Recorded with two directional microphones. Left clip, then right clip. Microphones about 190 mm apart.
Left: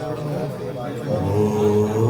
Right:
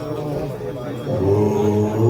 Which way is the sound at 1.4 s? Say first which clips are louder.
Even; 55° left (ahead or behind).